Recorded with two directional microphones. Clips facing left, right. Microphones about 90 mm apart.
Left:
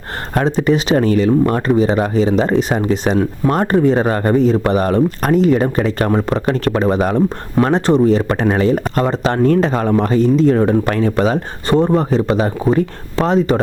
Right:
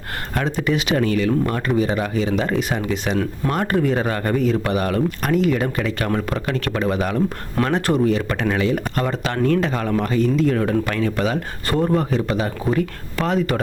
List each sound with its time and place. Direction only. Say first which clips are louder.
0.3 s speech: left 7 dB; 35° left (ahead or behind)